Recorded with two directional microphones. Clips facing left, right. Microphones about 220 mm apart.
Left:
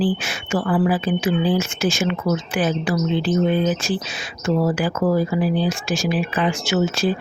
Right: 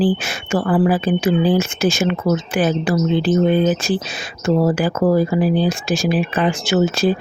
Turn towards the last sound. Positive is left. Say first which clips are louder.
# right 4 dB
turn(degrees=-35)  # may be behind; listen again after turning